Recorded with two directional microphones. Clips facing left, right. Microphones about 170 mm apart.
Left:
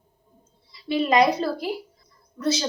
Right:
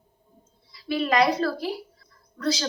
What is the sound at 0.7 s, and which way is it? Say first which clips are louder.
A woman's voice: left 3 dB; 20° left (ahead or behind).